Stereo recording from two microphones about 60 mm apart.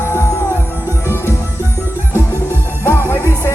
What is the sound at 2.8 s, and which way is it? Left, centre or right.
Music, left.